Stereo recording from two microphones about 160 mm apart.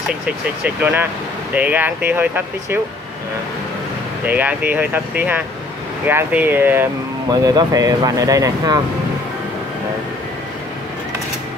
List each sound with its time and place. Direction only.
0.7 s speech: 10° right (ahead or behind)
4.3 s speech: 10° right (ahead or behind)
7.2 s speech: 25° right (ahead or behind)